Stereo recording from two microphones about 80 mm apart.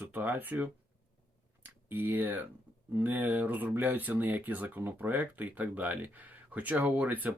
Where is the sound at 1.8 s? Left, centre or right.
Right.